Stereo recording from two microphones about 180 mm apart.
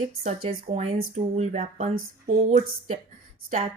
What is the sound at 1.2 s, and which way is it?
Speech, 40° right (ahead or behind).